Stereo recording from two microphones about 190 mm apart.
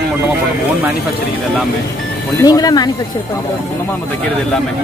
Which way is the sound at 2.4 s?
20° left (ahead or behind).